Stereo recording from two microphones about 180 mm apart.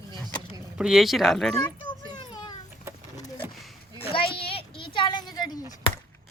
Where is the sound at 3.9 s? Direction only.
30° left (ahead or behind).